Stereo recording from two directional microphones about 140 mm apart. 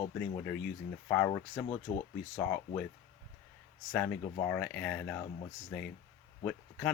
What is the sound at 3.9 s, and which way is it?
Speech, 10° left (ahead or behind).